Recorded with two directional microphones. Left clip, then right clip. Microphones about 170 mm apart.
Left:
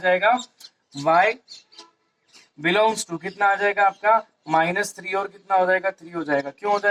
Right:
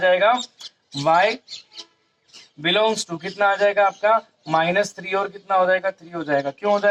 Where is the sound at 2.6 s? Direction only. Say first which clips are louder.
Even; 15° right (ahead or behind).